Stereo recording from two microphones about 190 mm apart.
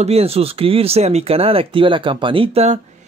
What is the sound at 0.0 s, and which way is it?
Speech, 30° right (ahead or behind).